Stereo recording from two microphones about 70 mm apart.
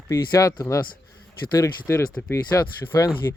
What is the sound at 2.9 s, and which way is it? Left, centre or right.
Speech, left.